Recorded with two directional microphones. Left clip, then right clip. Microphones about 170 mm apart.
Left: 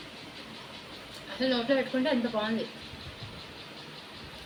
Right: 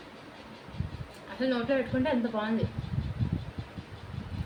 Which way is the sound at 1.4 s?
5° right (ahead or behind).